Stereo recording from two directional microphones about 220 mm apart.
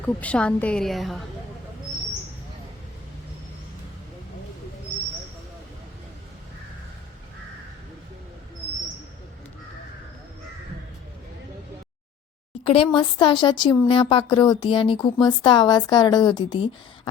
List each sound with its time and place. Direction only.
0.0 s a woman's voice: 5° left (ahead or behind)
12.6 s speech: 25° left (ahead or behind)